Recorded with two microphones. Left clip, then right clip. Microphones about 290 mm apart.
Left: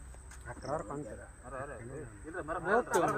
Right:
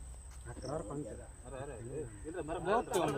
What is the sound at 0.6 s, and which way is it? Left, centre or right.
Speech, centre.